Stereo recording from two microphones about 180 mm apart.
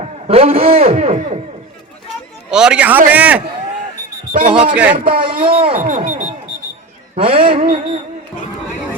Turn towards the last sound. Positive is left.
turn(degrees=-30)  # may be behind; listen again after turning